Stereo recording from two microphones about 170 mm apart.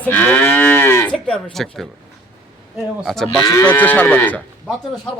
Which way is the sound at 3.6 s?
10° left (ahead or behind).